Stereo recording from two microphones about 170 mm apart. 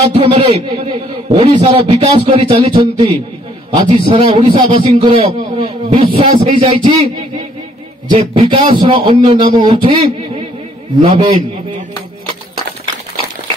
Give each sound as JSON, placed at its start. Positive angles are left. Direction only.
{"t": 0.1, "sound": "a man's voice", "side_deg": -35}
{"t": 8.1, "sound": "a man's voice", "side_deg": -30}